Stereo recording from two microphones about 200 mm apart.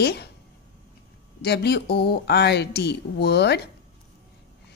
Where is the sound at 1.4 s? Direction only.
55° left (ahead or behind).